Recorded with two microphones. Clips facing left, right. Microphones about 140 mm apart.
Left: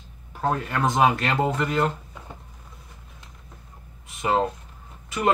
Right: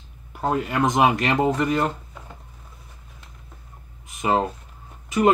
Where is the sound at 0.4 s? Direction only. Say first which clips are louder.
Right 2 dB; 15° right (ahead or behind).